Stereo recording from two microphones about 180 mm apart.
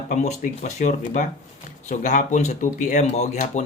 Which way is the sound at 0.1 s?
40° left (ahead or behind).